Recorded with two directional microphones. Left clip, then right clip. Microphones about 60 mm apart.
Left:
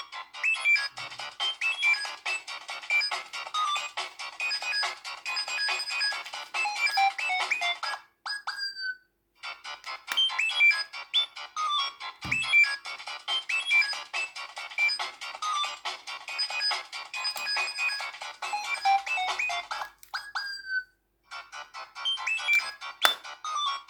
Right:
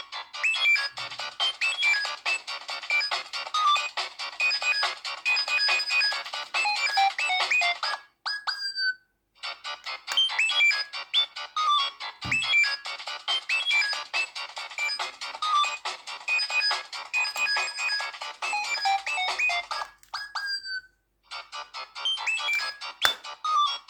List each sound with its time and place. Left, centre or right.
0.1 s music: right
15.9 s music: right; by 18.5 s centre
18.5 s music: right
21.3 s music: right